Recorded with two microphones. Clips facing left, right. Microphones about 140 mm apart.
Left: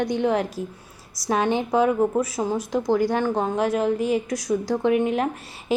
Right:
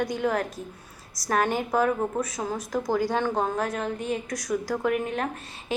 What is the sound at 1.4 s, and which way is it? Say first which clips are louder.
A woman's voice: left 3 dB; 20° left (ahead or behind).